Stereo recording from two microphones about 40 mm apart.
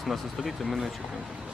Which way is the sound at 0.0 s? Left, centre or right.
Centre.